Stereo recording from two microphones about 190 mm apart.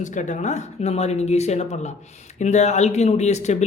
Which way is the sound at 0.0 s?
40° left (ahead or behind).